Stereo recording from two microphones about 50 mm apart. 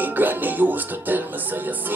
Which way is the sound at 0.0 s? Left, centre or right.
Right.